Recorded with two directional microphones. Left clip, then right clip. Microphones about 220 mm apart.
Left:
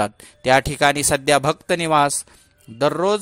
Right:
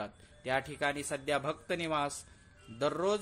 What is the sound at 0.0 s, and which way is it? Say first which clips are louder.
A man's voice: left 19 dB; 50° left (ahead or behind).